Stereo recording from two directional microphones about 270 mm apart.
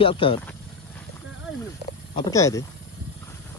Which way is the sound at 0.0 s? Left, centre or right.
Centre.